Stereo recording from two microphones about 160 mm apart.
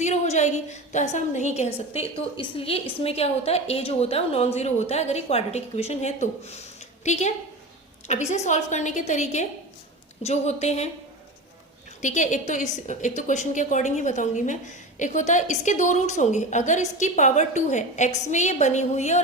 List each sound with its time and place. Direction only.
0.0 s a woman's voice: 45° left (ahead or behind)
12.0 s a woman's voice: 50° left (ahead or behind)